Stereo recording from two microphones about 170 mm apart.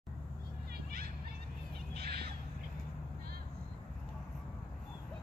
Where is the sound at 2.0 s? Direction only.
70° right (ahead or behind).